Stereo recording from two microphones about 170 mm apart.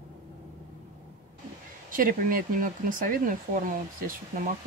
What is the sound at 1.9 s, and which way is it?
Speech, 55° right (ahead or behind).